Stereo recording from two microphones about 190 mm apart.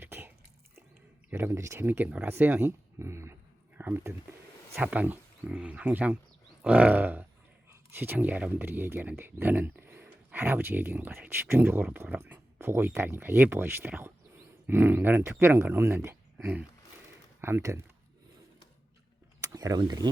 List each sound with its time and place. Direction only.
0.0 s a sound: 10° right (ahead or behind)
1.3 s speech: 10° right (ahead or behind)
19.5 s speech: 20° right (ahead or behind)